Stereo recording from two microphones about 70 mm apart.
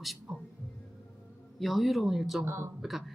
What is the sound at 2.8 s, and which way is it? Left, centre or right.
Speech, centre.